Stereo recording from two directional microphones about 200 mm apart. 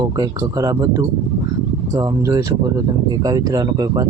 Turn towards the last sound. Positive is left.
turn(degrees=-15)  # may be behind; listen again after turning